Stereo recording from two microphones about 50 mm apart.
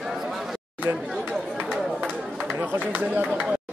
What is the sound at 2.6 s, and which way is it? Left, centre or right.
Speech, right.